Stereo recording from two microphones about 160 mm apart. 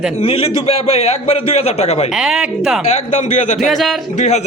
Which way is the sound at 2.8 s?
45° left (ahead or behind).